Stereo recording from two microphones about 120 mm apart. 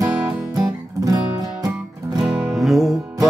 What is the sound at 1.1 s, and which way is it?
Music, 30° right (ahead or behind).